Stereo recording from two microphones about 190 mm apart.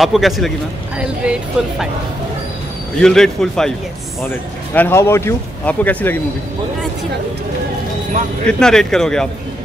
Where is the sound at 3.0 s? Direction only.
5° left (ahead or behind).